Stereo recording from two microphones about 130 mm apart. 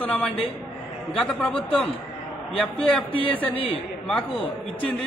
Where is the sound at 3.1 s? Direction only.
45° left (ahead or behind).